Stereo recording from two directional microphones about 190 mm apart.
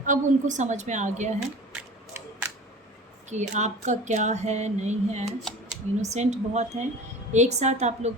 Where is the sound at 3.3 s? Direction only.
40° right (ahead or behind).